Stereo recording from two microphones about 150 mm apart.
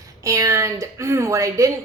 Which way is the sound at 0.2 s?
20° right (ahead or behind).